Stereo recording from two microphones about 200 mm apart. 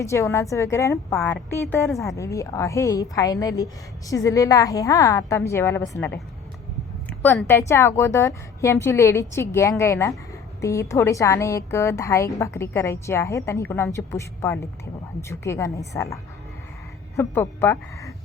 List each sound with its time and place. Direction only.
0.0 s a woman's voice: 15° left (ahead or behind)